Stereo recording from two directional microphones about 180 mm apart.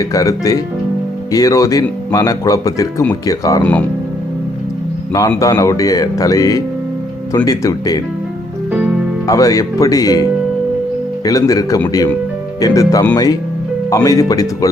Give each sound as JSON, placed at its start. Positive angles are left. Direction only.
{"t": 0.0, "sound": "speech", "side_deg": 20}
{"t": 5.4, "sound": "speech", "side_deg": 20}
{"t": 9.2, "sound": "speech", "side_deg": 20}
{"t": 11.3, "sound": "speech", "side_deg": 20}